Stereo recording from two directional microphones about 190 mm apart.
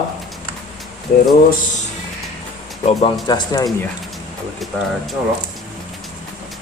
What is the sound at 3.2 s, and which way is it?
Speech, 20° left (ahead or behind).